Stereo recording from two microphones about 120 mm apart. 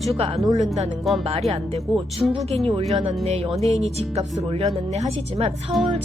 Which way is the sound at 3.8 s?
60° right (ahead or behind).